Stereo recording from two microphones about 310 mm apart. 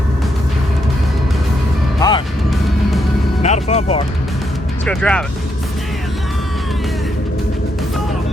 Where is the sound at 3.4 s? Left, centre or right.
Left.